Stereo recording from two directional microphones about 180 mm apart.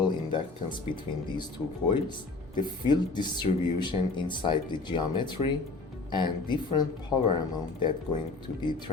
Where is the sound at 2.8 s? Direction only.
25° left (ahead or behind).